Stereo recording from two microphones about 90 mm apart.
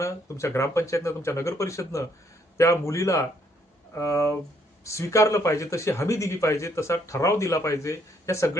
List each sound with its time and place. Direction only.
0.0 s a man's voice: 35° left (ahead or behind)